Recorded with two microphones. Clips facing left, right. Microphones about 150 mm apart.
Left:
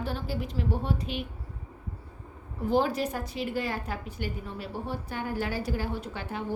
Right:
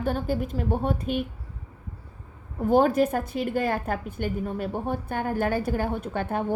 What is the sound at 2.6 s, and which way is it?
A woman's voice, 50° right (ahead or behind).